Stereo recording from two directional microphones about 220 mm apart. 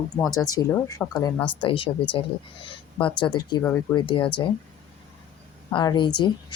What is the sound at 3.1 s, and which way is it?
A woman's voice, 20° left (ahead or behind).